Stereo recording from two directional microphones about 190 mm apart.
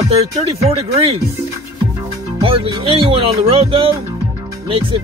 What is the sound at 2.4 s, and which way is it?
Speech, 30° right (ahead or behind).